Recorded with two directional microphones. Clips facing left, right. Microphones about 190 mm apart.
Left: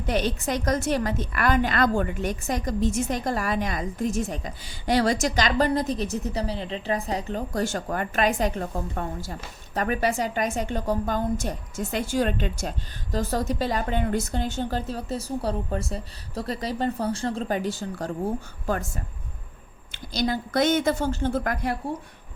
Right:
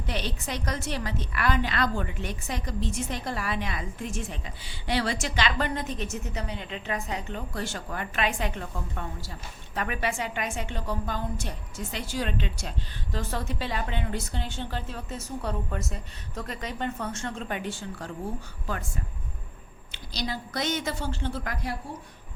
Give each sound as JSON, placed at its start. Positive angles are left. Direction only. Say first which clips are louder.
{"t": 0.0, "sound": "a woman's voice", "louder": "left 7 dB", "side_deg": 45}
{"t": 19.9, "sound": "a woman's voice", "louder": "left 7 dB", "side_deg": 50}